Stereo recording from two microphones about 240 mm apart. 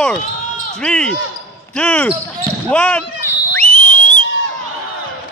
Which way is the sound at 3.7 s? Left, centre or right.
Left.